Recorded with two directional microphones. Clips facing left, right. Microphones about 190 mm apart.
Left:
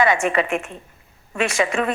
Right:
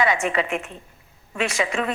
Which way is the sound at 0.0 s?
55° left (ahead or behind).